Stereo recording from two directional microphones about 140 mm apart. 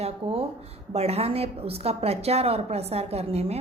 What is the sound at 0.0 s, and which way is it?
A woman's voice, 45° right (ahead or behind).